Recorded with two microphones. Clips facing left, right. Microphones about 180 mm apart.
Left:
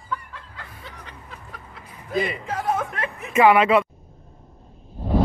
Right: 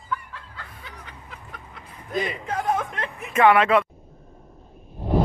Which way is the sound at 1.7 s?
5° left (ahead or behind).